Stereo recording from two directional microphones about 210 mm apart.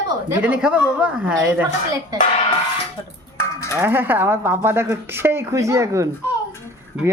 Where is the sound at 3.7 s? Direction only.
10° right (ahead or behind).